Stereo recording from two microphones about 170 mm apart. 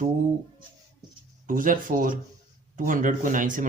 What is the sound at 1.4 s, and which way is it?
Speech, 50° right (ahead or behind).